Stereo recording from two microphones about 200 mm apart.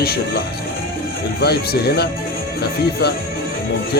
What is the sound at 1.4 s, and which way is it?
Speech, 50° left (ahead or behind).